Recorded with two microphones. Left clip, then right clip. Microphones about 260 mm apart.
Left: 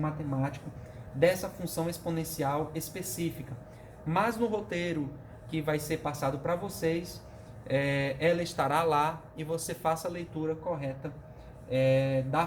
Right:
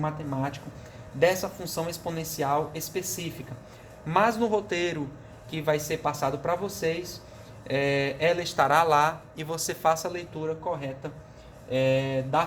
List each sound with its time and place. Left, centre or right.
1.2 s a man's voice: centre